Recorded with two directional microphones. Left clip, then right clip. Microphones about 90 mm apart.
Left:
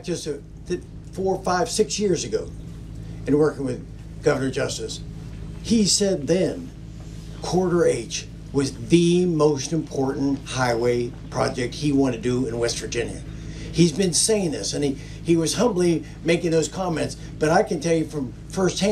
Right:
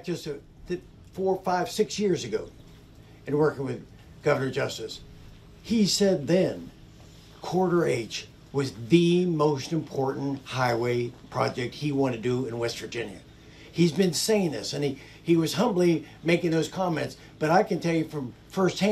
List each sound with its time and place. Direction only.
0.0 s speech: 20° right (ahead or behind)